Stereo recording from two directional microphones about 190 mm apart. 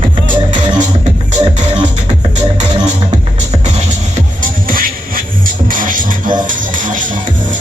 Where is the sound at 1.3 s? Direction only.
35° right (ahead or behind).